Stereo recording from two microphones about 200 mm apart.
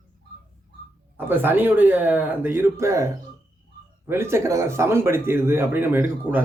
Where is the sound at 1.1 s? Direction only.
10° right (ahead or behind).